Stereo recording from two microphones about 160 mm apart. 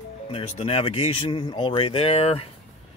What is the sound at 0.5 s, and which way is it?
Speech, 40° left (ahead or behind).